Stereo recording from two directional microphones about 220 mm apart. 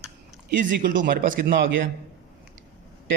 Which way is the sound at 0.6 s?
35° right (ahead or behind).